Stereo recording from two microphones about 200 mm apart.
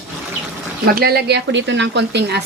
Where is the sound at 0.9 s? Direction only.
50° right (ahead or behind).